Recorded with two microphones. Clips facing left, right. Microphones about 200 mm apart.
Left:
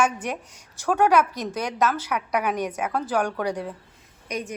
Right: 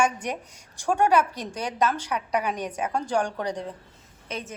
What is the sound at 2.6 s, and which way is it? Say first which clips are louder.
A woman's voice: left 2 dB; 10° left (ahead or behind).